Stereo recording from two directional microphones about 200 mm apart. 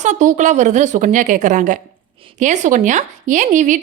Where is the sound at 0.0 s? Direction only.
40° right (ahead or behind).